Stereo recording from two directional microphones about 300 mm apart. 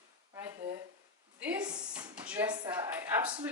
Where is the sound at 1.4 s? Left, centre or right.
Centre.